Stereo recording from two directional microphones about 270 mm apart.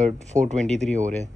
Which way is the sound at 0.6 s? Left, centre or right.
Centre.